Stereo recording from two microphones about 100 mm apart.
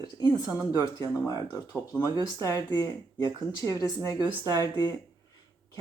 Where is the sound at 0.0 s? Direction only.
40° left (ahead or behind).